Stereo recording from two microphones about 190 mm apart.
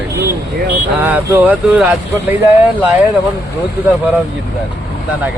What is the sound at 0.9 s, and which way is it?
Speech, 10° right (ahead or behind).